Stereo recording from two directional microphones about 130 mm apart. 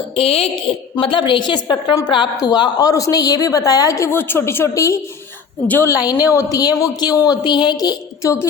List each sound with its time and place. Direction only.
0.2 s a woman's voice: 50° left (ahead or behind); by 4.9 s 25° left (ahead or behind)
5.6 s a woman's voice: 15° left (ahead or behind)
5.9 s a woman's voice: 30° left (ahead or behind)